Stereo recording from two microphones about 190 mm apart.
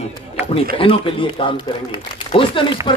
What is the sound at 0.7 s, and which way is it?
A man's voice, 30° left (ahead or behind).